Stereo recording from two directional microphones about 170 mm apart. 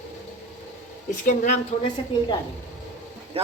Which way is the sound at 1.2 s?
50° left (ahead or behind).